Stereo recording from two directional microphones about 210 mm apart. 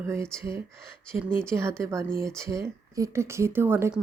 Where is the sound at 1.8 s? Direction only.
15° right (ahead or behind).